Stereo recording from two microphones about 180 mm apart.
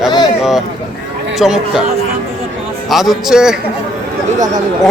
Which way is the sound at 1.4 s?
5° right (ahead or behind).